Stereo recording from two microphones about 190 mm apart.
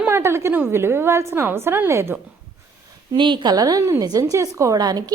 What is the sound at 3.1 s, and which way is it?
A woman's voice, 25° right (ahead or behind).